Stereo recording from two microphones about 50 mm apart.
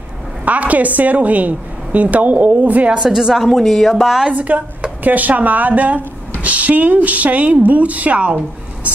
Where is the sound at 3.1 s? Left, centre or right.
Centre.